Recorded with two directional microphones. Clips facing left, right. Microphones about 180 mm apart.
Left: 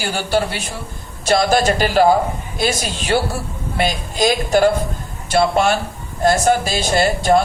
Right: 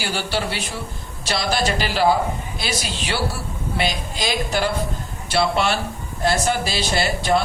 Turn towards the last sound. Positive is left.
turn(degrees=45)  # may be behind; listen again after turning